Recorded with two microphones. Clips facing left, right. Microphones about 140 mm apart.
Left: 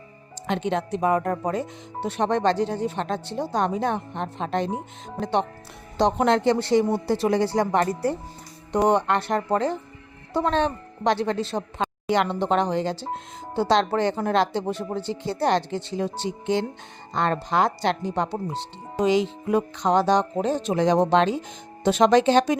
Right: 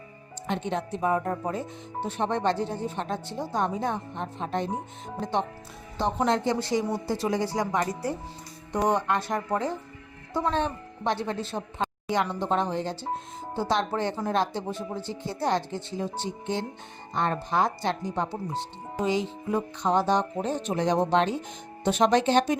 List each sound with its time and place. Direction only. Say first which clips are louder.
0.4 s speech: left 4 dB; 90° left
5.2 s speech: left 4 dB; 80° left
10.3 s speech: left 4 dB; 80° left
12.0 s speech: left 5 dB; 70° left (ahead or behind)
18.9 s speech: left 6 dB; 90° left